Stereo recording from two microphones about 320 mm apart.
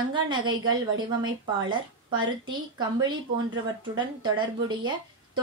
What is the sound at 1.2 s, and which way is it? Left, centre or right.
Speech, centre.